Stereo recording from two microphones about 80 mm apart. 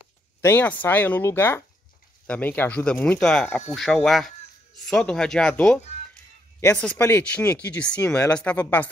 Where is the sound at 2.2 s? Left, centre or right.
Centre.